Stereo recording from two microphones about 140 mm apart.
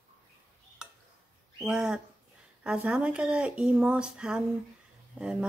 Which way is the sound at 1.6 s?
5° right (ahead or behind).